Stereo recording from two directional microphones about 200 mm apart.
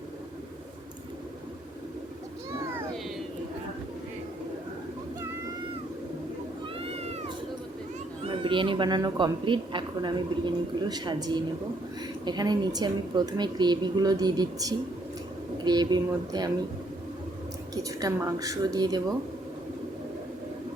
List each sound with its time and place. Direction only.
6.7 s cat: 30° right (ahead or behind)
8.2 s speech: 25° right (ahead or behind)
17.8 s speech: 15° right (ahead or behind)